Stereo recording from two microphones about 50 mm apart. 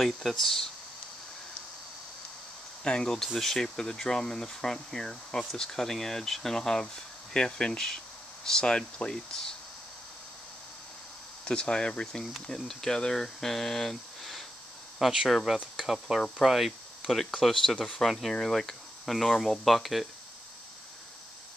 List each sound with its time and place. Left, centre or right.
0.0 s speech: centre
2.8 s speech: centre
11.4 s speech: centre
12.4 s speech: centre
15.0 s speech: centre